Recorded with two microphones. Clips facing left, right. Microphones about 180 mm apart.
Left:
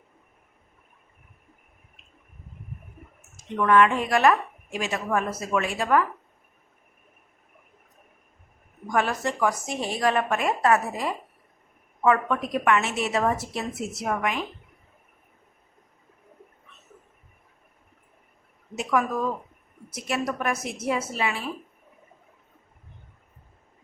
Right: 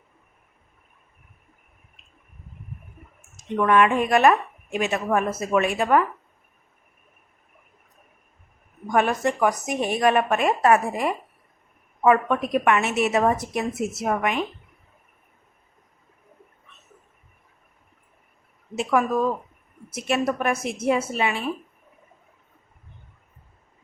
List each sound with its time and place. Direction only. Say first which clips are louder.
3.5 s speech: right 1 dB; 20° right (ahead or behind)
9.2 s a woman's voice: right 4 dB; 20° right (ahead or behind)
18.8 s speech: right 4 dB; 30° right (ahead or behind)